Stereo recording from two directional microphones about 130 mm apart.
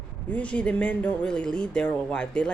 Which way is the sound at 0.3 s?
10° left (ahead or behind).